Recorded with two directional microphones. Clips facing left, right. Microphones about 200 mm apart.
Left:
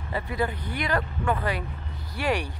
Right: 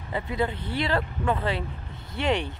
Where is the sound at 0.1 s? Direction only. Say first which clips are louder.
Right 1 dB; 20° right (ahead or behind).